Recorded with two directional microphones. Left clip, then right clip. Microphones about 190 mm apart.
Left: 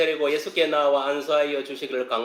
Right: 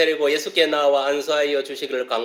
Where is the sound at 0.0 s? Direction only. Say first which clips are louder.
Right 4 dB; 25° right (ahead or behind).